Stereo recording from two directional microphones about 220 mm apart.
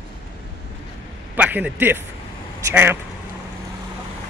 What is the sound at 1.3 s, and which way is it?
A man's voice, 5° right (ahead or behind).